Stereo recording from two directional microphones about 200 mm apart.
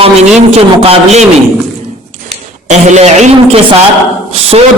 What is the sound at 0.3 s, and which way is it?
Speech, 30° right (ahead or behind).